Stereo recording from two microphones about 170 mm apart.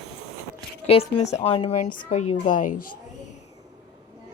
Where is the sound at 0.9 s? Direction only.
40° left (ahead or behind).